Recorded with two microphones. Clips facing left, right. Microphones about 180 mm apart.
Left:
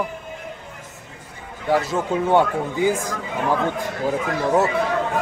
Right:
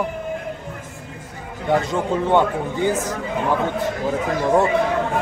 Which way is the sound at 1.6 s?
5° left (ahead or behind).